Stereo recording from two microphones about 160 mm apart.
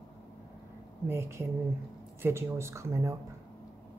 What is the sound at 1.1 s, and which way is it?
Speech, 15° right (ahead or behind).